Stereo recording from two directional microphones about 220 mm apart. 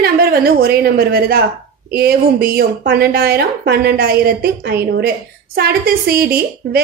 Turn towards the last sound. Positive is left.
turn(degrees=-45)  # may be behind; listen again after turning